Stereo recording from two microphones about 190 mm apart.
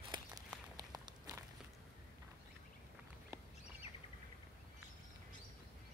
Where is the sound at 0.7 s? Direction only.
20° right (ahead or behind).